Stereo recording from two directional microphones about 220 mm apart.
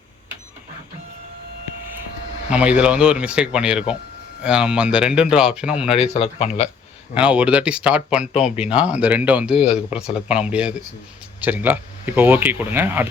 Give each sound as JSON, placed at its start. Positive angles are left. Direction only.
{"t": 2.5, "sound": "speech", "side_deg": -5}
{"t": 6.0, "sound": "speech", "side_deg": 25}
{"t": 7.1, "sound": "speech", "side_deg": -5}